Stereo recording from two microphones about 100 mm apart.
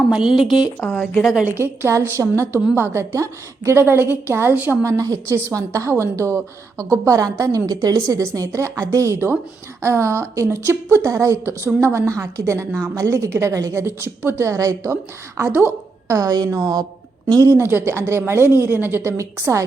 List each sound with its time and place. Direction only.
0.1 s speech: 5° right (ahead or behind)
1.5 s a woman's voice: 25° right (ahead or behind)
4.8 s a woman's voice: 35° right (ahead or behind)
15.4 s a woman's voice: 20° right (ahead or behind)
16.1 s a woman's voice: 40° right (ahead or behind)